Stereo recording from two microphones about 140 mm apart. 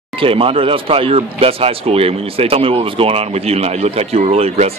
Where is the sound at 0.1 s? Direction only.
40° right (ahead or behind).